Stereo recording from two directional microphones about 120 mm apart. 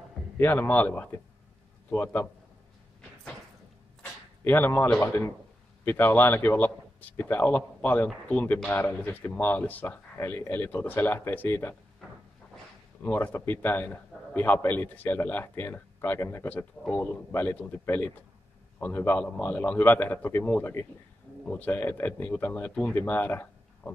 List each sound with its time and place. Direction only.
0.4 s a man's voice: 15° left (ahead or behind)
4.0 s a sound: 15° left (ahead or behind)
4.9 s a man's voice: 20° left (ahead or behind)
13.0 s a man's voice: 15° left (ahead or behind)